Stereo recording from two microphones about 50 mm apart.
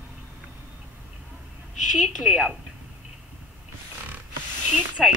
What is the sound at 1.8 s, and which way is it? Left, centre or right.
Speech, centre.